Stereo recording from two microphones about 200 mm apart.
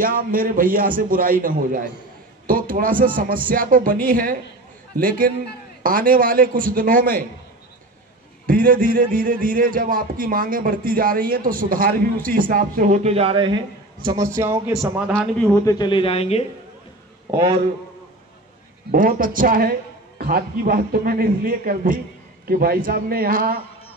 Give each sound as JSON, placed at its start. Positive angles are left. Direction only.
{"t": 0.0, "sound": "a man's voice", "side_deg": -45}
{"t": 8.5, "sound": "a man's voice", "side_deg": -45}
{"t": 15.6, "sound": "a man's voice", "side_deg": 20}
{"t": 17.3, "sound": "a man's voice", "side_deg": -20}
{"t": 18.9, "sound": "a man's voice", "side_deg": -45}